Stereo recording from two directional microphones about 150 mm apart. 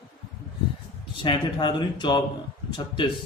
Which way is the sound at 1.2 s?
30° left (ahead or behind).